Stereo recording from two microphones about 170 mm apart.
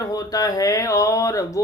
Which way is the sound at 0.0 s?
20° left (ahead or behind).